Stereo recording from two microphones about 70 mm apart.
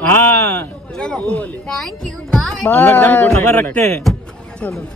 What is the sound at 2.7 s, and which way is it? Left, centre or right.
Speech, left.